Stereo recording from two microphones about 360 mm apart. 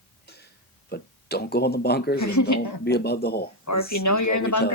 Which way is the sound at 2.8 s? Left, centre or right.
Left.